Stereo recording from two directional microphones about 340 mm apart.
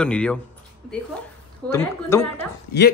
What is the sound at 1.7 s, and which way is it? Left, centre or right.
Speech, centre.